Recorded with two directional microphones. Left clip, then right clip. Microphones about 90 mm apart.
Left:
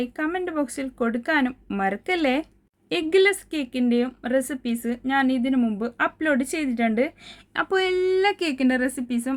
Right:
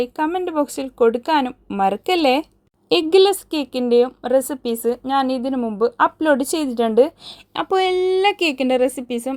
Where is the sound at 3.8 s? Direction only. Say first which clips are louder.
Right 9 dB; 25° left (ahead or behind).